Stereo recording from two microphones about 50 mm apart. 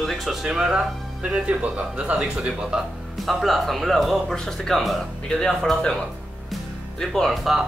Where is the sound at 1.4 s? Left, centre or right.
Right.